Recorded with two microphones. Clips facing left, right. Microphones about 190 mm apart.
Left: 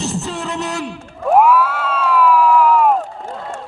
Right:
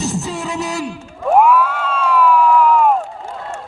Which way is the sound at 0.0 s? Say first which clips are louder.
Right 1 dB; centre (ahead or behind).